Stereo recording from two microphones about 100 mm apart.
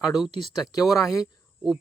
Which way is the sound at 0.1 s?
Centre (ahead or behind).